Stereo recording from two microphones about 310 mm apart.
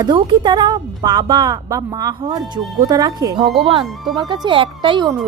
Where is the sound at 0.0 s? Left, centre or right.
Centre.